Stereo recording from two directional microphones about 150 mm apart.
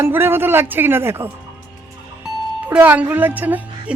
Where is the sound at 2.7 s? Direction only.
10° right (ahead or behind).